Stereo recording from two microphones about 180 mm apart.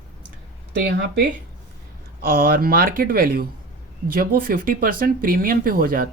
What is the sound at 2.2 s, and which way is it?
Speech, 50° right (ahead or behind).